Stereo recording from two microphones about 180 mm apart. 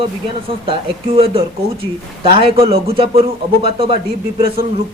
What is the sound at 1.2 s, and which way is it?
Speech, 35° right (ahead or behind).